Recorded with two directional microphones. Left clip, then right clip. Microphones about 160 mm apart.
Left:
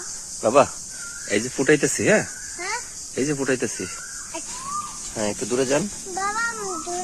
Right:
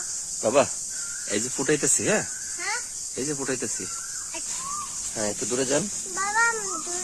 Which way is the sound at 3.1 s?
15° left (ahead or behind).